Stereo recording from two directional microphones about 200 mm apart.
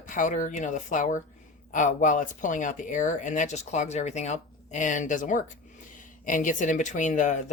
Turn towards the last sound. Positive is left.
turn(degrees=40)  # may be behind; listen again after turning